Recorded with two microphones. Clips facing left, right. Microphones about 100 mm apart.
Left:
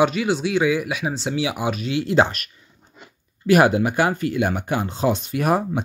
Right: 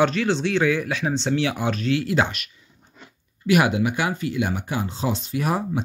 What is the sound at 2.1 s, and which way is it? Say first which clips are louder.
Speech: left 4 dB; 40° left (ahead or behind).